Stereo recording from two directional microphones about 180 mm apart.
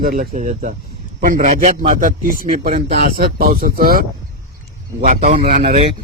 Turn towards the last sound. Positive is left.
turn(degrees=-50)  # may be behind; listen again after turning